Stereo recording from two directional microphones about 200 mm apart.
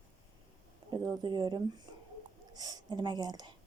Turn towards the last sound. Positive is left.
turn(degrees=-20)  # may be behind; listen again after turning